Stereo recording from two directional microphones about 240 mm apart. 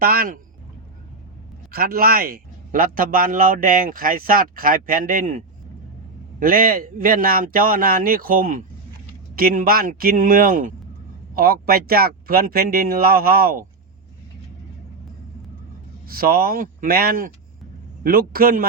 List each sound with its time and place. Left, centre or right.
0.0 s speech: right
1.7 s speech: right
6.4 s speech: right
16.0 s speech: right